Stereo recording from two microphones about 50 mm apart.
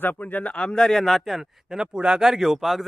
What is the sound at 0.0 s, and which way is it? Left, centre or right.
Speech, left.